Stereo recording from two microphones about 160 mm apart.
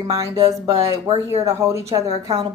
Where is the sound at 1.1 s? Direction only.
40° right (ahead or behind).